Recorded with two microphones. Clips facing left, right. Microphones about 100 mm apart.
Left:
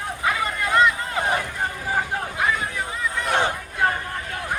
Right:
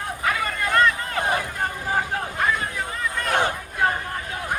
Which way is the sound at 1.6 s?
Centre (ahead or behind).